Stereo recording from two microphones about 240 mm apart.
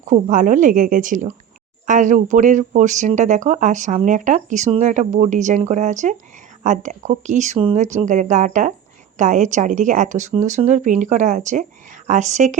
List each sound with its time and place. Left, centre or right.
0.0 s speech: right